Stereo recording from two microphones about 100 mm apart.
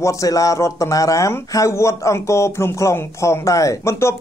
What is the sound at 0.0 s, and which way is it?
Speech, 35° left (ahead or behind).